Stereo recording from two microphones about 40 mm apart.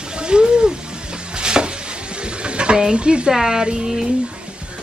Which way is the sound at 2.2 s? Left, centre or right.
Right.